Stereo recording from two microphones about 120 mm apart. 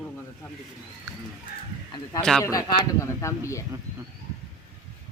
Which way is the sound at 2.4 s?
25° left (ahead or behind).